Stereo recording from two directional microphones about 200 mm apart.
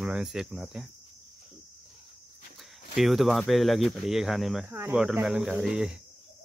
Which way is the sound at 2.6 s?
Centre (ahead or behind).